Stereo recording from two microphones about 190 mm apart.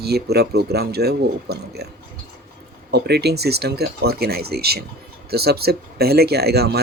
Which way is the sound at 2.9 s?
60° right (ahead or behind).